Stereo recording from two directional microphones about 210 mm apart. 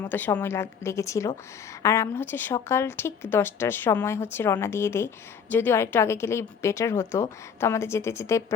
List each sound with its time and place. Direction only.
0.0 s a woman's voice: 10° left (ahead or behind)